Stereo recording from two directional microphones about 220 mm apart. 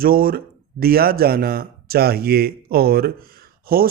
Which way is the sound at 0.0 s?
40° right (ahead or behind).